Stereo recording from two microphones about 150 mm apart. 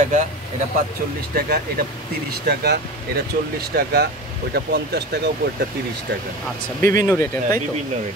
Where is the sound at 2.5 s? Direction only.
90° right.